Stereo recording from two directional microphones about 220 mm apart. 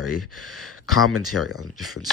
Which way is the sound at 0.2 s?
Centre (ahead or behind).